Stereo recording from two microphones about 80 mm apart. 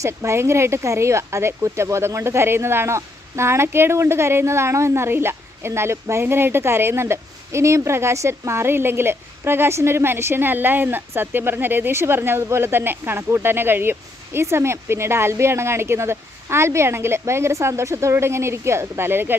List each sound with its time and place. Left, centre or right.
0.0 s speech: right